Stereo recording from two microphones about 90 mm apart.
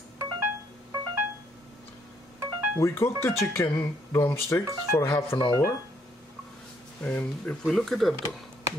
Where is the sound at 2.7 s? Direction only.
30° left (ahead or behind).